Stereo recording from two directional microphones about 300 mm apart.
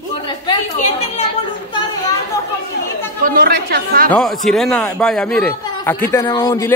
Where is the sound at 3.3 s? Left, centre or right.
Right.